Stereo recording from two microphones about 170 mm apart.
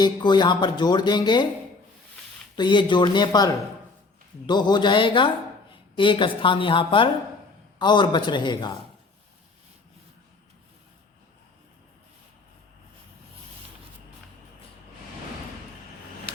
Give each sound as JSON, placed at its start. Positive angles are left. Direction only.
{"t": 0.0, "sound": "speech", "side_deg": 25}
{"t": 2.6, "sound": "speech", "side_deg": 25}